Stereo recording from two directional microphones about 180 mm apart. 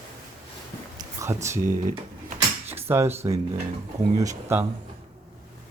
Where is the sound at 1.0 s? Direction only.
15° right (ahead or behind).